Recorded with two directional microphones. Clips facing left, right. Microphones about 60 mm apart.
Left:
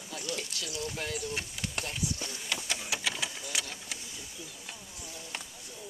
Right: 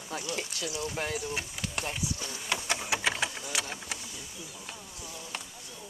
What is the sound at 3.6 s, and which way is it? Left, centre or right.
Vehicle, right.